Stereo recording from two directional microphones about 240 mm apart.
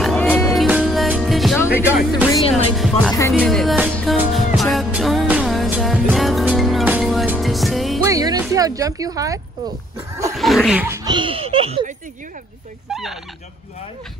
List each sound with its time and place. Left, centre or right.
0.0 s music: centre
2.5 s speech: centre
3.1 s speech: centre
3.9 s music: centre
8.0 s speech: centre
10.3 s speech: centre
11.1 s speech: right
12.9 s speech: centre